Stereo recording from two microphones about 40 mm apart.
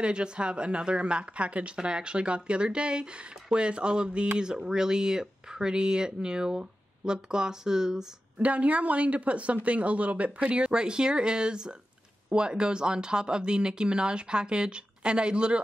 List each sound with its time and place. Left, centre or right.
0.0 s speech: right
8.4 s a woman's voice: right